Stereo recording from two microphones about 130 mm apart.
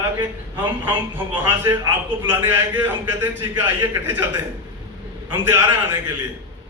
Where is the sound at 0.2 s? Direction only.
15° right (ahead or behind).